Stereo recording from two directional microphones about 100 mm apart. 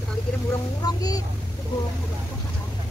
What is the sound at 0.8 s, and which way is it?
Speech, 40° left (ahead or behind).